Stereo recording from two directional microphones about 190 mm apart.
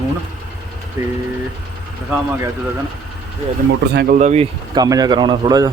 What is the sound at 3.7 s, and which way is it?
Speech, 60° right (ahead or behind).